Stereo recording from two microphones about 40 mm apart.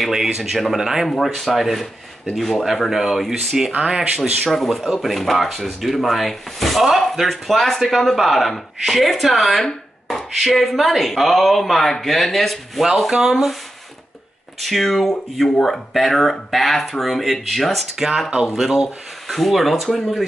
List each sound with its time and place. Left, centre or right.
0.0 s speech: centre
1.2 s speech: centre
3.8 s speech: right
5.0 s speech: centre
14.6 s speech: centre
17.9 s speech: centre